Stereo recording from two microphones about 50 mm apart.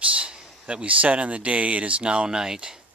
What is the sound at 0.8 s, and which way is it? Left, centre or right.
Speech, right.